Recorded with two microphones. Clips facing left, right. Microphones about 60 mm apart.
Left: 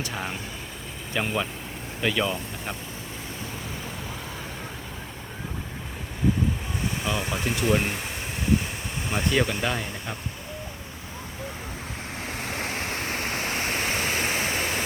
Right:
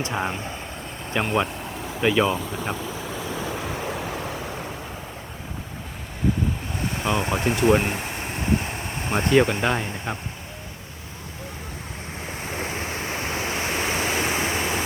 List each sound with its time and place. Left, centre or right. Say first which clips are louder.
0.0 s speech: right 5 dB; right
3.5 s vehicle: right 7 dB; right
7.0 s speech: right 7 dB; right
9.0 s speech: right 6 dB; right
12.2 s waves: right 1 dB; centre
13.1 s waterfall: right 3 dB; centre